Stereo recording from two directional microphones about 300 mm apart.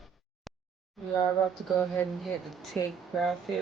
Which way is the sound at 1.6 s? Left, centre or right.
Centre.